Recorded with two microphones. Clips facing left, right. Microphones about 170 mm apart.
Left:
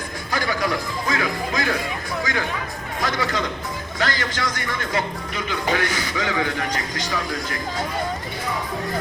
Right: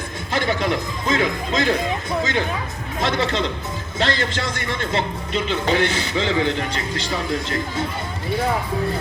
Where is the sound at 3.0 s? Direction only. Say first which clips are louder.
Right 3 dB; 25° right (ahead or behind).